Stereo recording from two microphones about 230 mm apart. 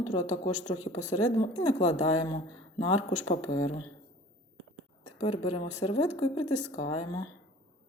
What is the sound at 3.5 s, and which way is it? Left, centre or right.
Speech, left.